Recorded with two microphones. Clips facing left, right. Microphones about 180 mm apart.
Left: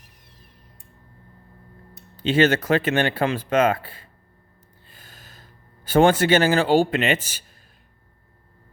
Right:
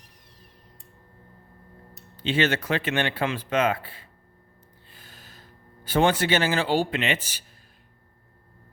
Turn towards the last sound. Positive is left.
turn(degrees=45)  # may be behind; listen again after turning